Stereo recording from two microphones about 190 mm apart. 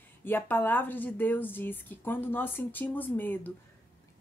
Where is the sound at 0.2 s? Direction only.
10° left (ahead or behind).